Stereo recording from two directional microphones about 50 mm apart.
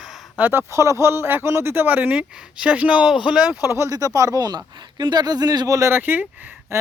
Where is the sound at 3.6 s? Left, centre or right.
Right.